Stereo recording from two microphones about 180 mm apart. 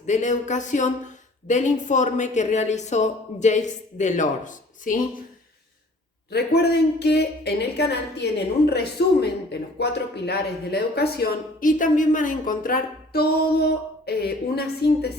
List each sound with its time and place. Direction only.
0.0 s a sound: 40° left (ahead or behind)
1.5 s a woman's voice: 45° left (ahead or behind)
6.3 s speech: 65° left (ahead or behind)